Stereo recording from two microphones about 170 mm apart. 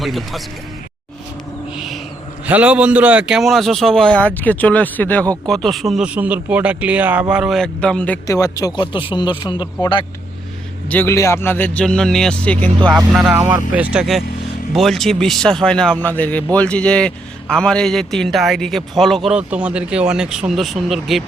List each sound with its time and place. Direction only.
0.0 s a man's voice: centre (ahead or behind)
1.7 s owl: centre (ahead or behind)
2.5 s a man's voice: 10° right (ahead or behind)
8.3 s speech: 20° left (ahead or behind)
10.8 s a man's voice: 10° left (ahead or behind)
12.8 s speech: 20° right (ahead or behind)
13.1 s a man's voice: 10° right (ahead or behind)